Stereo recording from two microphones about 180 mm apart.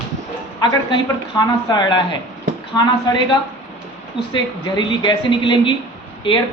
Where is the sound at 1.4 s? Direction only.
25° left (ahead or behind).